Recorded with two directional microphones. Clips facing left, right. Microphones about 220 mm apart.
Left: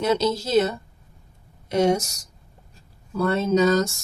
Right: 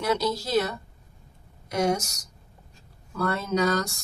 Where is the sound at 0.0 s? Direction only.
25° left (ahead or behind).